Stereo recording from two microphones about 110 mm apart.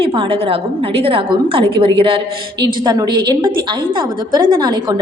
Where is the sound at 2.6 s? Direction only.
40° right (ahead or behind).